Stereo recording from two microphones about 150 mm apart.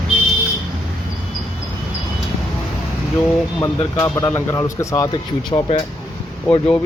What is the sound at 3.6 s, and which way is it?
Speech, 20° left (ahead or behind).